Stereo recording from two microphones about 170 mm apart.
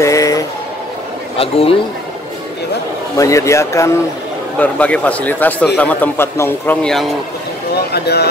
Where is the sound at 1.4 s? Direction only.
35° left (ahead or behind).